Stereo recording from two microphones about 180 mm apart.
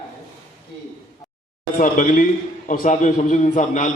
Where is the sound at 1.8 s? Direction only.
50° left (ahead or behind).